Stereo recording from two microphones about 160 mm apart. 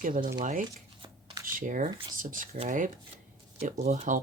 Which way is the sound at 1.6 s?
55° right (ahead or behind).